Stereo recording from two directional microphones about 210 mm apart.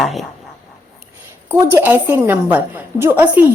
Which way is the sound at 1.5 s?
10° right (ahead or behind).